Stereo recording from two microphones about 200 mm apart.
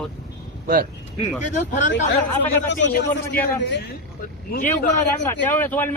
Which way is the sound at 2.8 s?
55° left (ahead or behind).